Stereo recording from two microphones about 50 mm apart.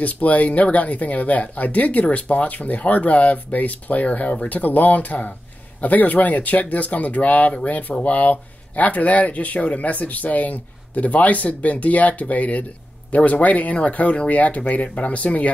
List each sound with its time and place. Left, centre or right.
0.0 s speech: left